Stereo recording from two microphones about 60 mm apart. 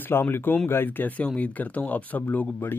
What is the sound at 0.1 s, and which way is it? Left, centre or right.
Speech, left.